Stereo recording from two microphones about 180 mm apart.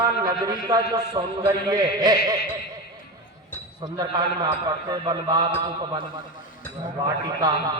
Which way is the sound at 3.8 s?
25° right (ahead or behind).